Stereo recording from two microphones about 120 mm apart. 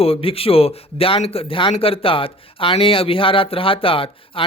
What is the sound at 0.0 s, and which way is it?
Speech, 50° left (ahead or behind).